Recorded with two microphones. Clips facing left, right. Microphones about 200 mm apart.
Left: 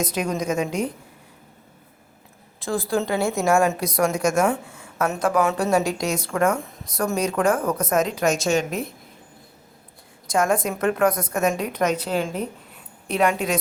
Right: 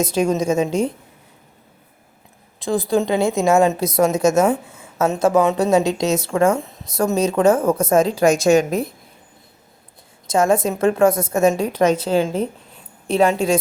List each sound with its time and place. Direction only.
0.0 s a woman's voice: 25° right (ahead or behind)
2.6 s a woman's voice: 20° right (ahead or behind); by 8.9 s 35° right (ahead or behind)
10.2 s a woman's voice: 25° right (ahead or behind)